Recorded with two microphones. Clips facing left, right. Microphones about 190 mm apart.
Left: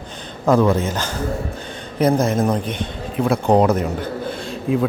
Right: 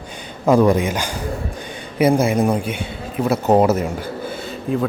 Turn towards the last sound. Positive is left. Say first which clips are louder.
# left 1 dB
turn(degrees=0)  # may be behind; listen again after turning